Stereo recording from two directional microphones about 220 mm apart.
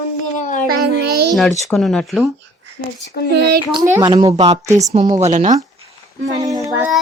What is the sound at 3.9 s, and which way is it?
Speech, 15° right (ahead or behind).